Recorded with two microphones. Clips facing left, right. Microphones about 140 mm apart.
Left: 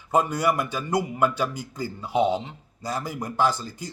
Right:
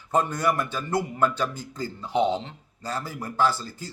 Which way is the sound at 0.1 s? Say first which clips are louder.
Left 2 dB; 10° left (ahead or behind).